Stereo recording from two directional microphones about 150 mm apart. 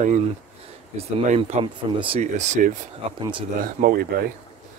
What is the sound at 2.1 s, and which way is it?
Speech, 50° right (ahead or behind).